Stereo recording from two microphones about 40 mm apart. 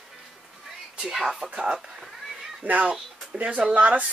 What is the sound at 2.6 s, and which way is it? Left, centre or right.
Speech, right.